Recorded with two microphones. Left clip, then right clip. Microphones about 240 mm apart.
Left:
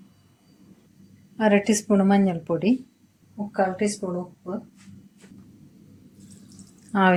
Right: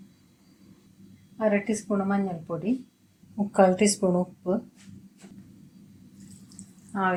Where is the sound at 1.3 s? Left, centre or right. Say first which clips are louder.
Left 5 dB; left.